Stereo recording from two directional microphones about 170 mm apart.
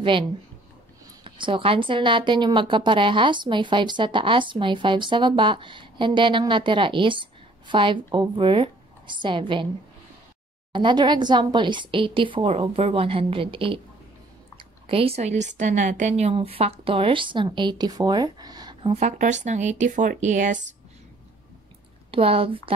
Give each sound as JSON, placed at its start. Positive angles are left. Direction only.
{"t": 1.2, "sound": "a woman's voice", "side_deg": -30}
{"t": 10.7, "sound": "a woman's voice", "side_deg": -30}
{"t": 14.9, "sound": "a woman's voice", "side_deg": -35}
{"t": 22.1, "sound": "a woman's voice", "side_deg": -35}